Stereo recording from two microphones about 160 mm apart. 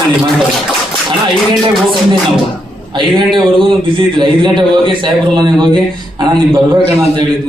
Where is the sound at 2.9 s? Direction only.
30° right (ahead or behind).